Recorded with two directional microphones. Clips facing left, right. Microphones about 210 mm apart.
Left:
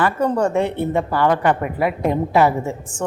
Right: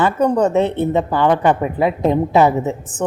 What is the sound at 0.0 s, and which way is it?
A woman's voice, 20° right (ahead or behind).